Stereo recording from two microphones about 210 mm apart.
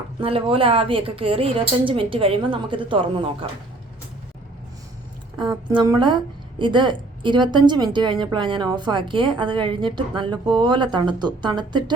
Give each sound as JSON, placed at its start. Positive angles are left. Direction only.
{"t": 0.2, "sound": "a woman's voice", "side_deg": -25}
{"t": 5.4, "sound": "a woman's voice", "side_deg": -20}